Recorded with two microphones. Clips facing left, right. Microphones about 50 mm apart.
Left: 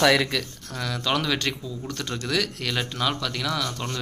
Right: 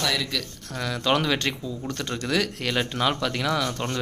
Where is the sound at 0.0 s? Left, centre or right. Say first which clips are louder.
Left 7 dB; left.